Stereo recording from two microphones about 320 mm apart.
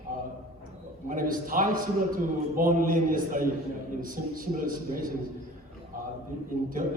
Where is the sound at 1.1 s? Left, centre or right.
Right.